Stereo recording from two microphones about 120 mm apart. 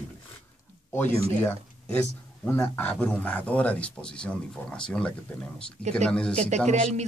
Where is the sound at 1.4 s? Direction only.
20° left (ahead or behind).